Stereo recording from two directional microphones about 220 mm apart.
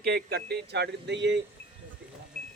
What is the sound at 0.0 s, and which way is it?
Speech, 45° right (ahead or behind).